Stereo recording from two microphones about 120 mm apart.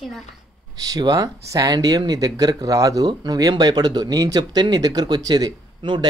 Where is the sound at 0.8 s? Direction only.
35° right (ahead or behind).